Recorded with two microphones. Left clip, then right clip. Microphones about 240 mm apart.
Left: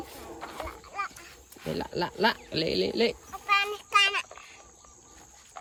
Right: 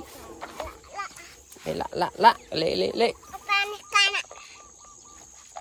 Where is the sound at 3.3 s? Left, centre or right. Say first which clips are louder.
Even; centre.